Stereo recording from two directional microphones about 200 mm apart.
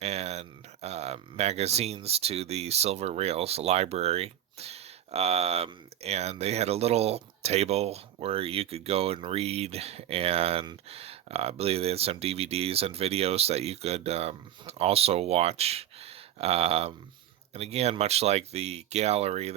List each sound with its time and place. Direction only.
0.0 s speech: 30° right (ahead or behind)